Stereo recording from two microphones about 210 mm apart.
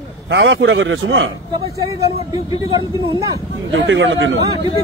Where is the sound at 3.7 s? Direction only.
60° right (ahead or behind).